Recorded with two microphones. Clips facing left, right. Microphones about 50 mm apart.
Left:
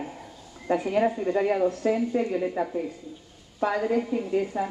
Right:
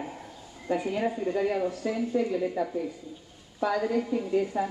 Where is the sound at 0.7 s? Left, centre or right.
Left.